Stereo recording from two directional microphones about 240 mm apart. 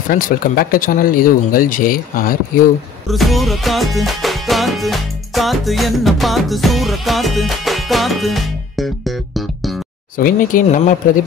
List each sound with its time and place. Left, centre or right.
0.1 s speech: left
3.1 s music: centre
10.1 s speech: left